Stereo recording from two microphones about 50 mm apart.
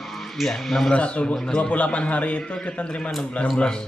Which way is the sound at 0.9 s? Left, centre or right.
Left.